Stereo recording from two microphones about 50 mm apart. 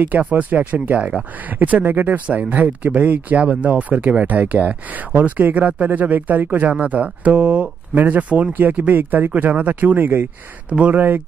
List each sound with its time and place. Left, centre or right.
0.0 s speech: right
8.0 s speech: right